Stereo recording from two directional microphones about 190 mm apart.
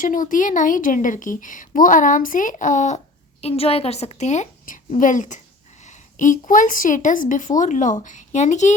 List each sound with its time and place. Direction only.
0.0 s a woman's voice: 45° left (ahead or behind)